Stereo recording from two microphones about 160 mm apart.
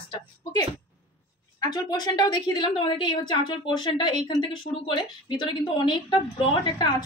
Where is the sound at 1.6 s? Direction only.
25° left (ahead or behind).